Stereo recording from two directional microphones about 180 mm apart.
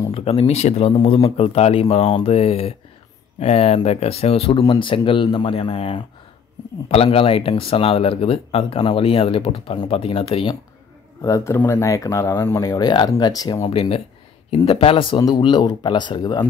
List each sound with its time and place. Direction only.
0.0 s speech: 30° left (ahead or behind)
11.2 s speech: 15° left (ahead or behind)
13.7 s speech: 30° left (ahead or behind)